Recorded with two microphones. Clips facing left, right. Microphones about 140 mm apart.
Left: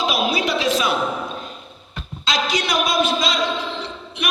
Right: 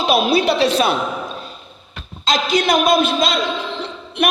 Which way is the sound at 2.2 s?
50° right (ahead or behind).